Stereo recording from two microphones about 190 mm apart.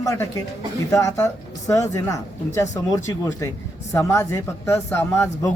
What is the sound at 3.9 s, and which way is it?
Speech, 15° left (ahead or behind).